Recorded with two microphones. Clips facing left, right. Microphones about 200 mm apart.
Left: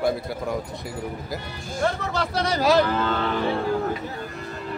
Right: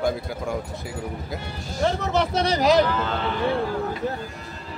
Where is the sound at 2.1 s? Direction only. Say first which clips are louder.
Right 3 dB; 20° right (ahead or behind).